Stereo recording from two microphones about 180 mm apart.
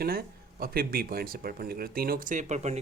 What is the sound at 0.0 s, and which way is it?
Speech, 55° right (ahead or behind).